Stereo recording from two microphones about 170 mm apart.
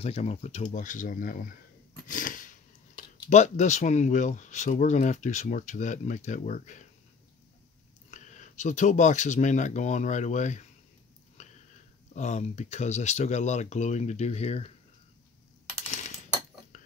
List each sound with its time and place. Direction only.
0.0 s speech: 40° left (ahead or behind)
2.0 s a sound: 50° left (ahead or behind)
3.3 s speech: 45° left (ahead or behind)
8.1 s speech: 45° left (ahead or behind)
11.4 s a sound: 45° left (ahead or behind)
12.1 s speech: 45° left (ahead or behind)